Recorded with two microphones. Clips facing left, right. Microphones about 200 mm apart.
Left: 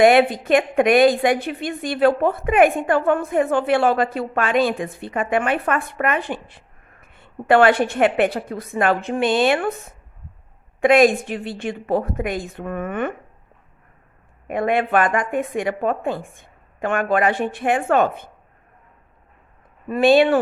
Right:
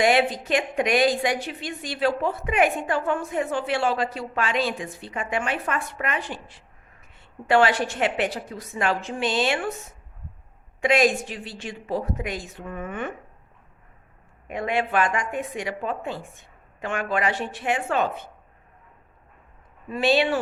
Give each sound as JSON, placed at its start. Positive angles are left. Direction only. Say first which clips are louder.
{"t": 0.0, "sound": "a woman's voice", "louder": "left 7 dB", "side_deg": 55}
{"t": 14.4, "sound": "a woman's voice", "louder": "left 6 dB", "side_deg": 55}
{"t": 19.9, "sound": "a woman's voice", "louder": "left 7 dB", "side_deg": 55}